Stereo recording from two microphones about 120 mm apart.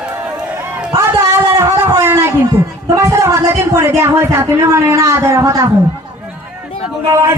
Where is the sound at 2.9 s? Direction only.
25° right (ahead or behind).